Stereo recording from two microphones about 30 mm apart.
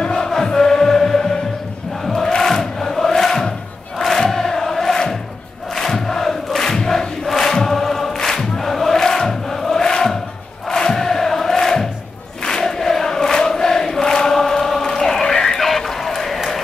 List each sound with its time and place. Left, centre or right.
0.0 s music: left
2.2 s chant: centre
3.2 s crowd: centre
4.0 s chant: centre
5.8 s crowd: centre
7.6 s choir: centre
8.9 s chant: centre
9.8 s music: left
10.7 s crowd: centre
12.4 s a sound: centre